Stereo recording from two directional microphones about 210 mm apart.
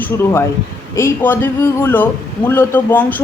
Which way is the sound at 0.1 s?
10° left (ahead or behind).